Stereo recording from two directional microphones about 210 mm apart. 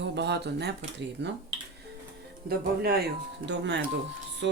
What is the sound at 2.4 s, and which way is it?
Speech, 45° right (ahead or behind).